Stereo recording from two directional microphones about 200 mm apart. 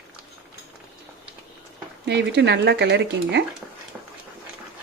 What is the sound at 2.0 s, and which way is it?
Speech, 60° right (ahead or behind).